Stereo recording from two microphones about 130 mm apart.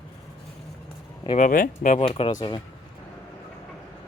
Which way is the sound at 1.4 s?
90° left.